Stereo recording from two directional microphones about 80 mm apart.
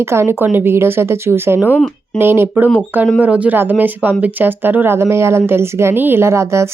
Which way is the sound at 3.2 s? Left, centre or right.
Centre.